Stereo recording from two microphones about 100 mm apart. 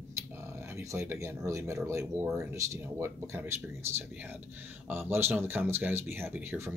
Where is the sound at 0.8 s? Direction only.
30° right (ahead or behind).